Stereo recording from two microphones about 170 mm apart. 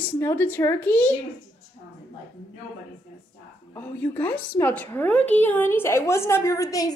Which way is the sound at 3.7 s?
10° left (ahead or behind).